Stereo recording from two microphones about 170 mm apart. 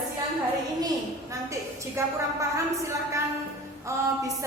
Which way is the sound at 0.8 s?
20° right (ahead or behind).